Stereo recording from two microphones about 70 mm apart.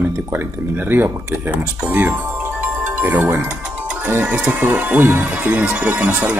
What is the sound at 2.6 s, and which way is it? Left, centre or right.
Music, right.